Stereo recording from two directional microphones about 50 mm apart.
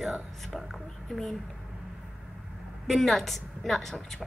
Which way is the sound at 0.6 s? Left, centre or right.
Centre.